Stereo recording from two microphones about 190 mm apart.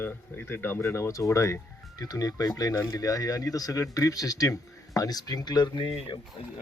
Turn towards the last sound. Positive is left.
turn(degrees=30)  # may be behind; listen again after turning